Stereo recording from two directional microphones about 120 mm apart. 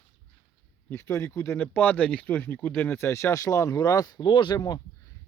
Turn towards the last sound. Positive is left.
turn(degrees=35)  # may be behind; listen again after turning